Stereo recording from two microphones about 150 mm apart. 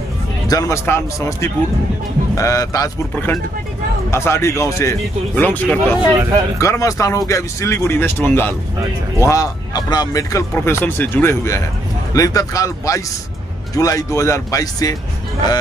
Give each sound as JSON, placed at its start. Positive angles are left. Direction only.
{"t": 0.5, "sound": "speech", "side_deg": 20}